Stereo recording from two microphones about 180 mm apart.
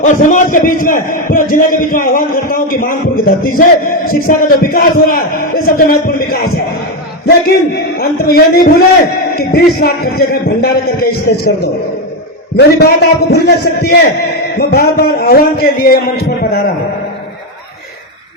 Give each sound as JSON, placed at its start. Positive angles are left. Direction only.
{"t": 0.0, "sound": "a man's voice", "side_deg": 45}
{"t": 7.9, "sound": "a man's voice", "side_deg": 60}